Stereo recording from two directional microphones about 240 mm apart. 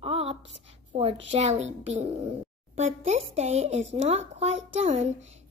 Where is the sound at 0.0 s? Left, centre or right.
Right.